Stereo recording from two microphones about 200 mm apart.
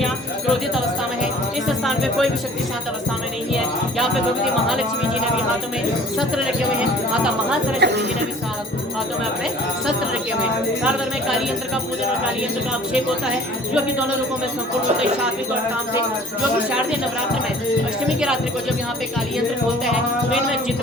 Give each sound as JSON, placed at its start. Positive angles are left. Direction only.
{"t": 1.6, "sound": "music", "side_deg": 0}
{"t": 6.1, "sound": "speech", "side_deg": 0}
{"t": 7.8, "sound": "music", "side_deg": -55}